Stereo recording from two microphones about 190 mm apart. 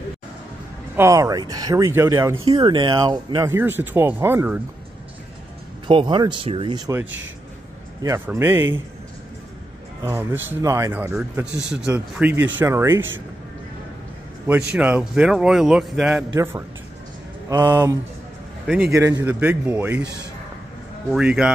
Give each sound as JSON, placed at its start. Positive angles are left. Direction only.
{"t": 0.9, "sound": "speech", "side_deg": -15}
{"t": 2.5, "sound": "speech", "side_deg": -25}
{"t": 5.9, "sound": "speech", "side_deg": -25}
{"t": 8.0, "sound": "speech", "side_deg": -15}
{"t": 10.0, "sound": "speech", "side_deg": -10}
{"t": 14.5, "sound": "a man's voice", "side_deg": -5}
{"t": 17.5, "sound": "speech", "side_deg": -15}
{"t": 21.1, "sound": "a man's voice", "side_deg": -5}